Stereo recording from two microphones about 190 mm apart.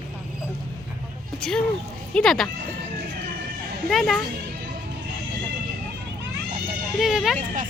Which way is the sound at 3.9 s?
Centre (ahead or behind).